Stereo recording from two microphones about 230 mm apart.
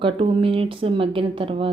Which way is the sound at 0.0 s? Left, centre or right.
Right.